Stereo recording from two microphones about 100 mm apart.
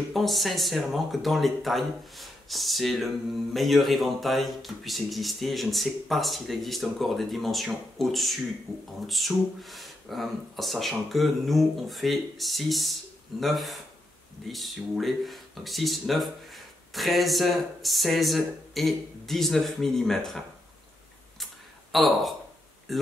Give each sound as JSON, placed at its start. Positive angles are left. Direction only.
{"t": 0.1, "sound": "speech", "side_deg": 0}
{"t": 21.9, "sound": "speech", "side_deg": 0}